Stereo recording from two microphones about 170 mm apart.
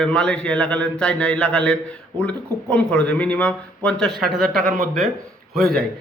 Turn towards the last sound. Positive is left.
turn(degrees=0)  # may be behind; listen again after turning